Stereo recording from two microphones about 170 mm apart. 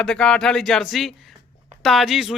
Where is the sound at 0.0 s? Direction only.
5° left (ahead or behind).